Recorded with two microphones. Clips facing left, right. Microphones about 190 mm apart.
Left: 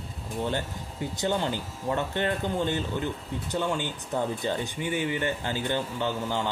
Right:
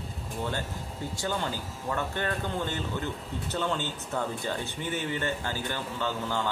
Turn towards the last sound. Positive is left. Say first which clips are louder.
# left 2 dB
turn(degrees=20)  # may be behind; listen again after turning